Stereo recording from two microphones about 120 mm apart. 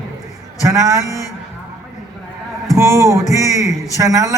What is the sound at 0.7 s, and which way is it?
Music, 25° right (ahead or behind).